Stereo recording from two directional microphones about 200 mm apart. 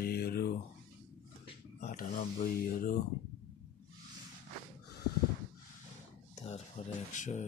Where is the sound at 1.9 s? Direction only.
45° left (ahead or behind).